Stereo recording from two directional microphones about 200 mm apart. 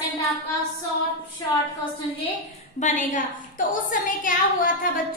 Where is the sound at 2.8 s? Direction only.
40° left (ahead or behind).